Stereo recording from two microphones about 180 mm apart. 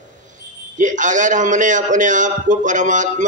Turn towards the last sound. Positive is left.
turn(degrees=-45)  # may be behind; listen again after turning